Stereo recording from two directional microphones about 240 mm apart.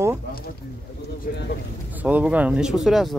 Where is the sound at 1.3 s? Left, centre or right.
Left.